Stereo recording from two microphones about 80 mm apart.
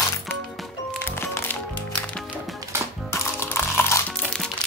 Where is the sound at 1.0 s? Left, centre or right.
Left.